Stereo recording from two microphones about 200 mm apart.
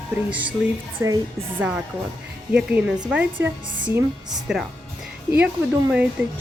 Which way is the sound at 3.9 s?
20° right (ahead or behind).